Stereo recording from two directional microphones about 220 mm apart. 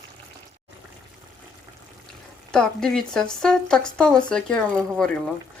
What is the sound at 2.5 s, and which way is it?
Speech, 5° left (ahead or behind).